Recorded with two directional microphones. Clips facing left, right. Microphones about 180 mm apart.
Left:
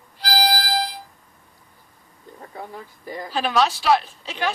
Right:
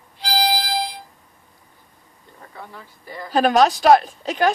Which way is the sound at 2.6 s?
40° left (ahead or behind).